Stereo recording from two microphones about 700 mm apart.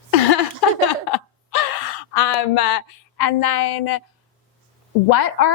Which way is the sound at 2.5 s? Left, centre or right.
Left.